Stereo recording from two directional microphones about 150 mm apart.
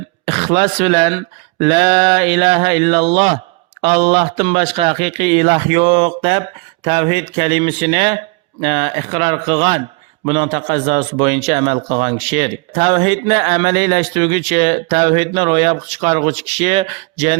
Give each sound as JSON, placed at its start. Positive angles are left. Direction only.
{"t": 0.3, "sound": "a man's voice", "side_deg": -40}